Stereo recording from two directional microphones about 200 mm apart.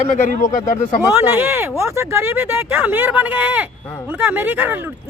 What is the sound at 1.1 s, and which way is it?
Speech, 10° right (ahead or behind).